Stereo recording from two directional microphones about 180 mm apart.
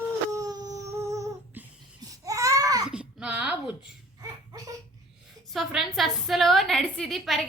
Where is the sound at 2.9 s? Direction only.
5° right (ahead or behind).